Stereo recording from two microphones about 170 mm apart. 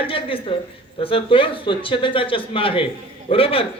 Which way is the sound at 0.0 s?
30° left (ahead or behind).